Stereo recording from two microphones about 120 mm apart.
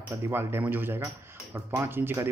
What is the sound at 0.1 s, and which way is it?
A man's voice, 20° right (ahead or behind).